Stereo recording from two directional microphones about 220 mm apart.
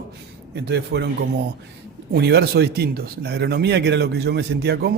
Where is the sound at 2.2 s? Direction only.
50° right (ahead or behind).